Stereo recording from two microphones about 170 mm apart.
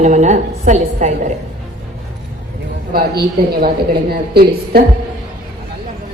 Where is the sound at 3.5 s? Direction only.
65° right (ahead or behind).